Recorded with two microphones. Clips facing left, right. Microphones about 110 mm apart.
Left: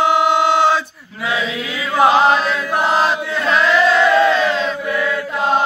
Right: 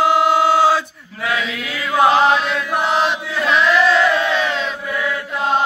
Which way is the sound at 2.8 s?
40° left (ahead or behind).